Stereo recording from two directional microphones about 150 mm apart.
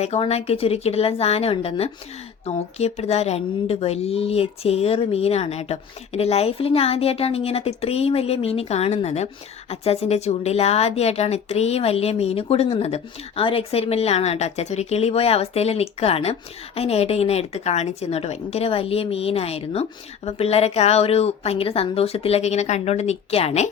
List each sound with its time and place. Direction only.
0.0 s a woman's voice: 45° left (ahead or behind)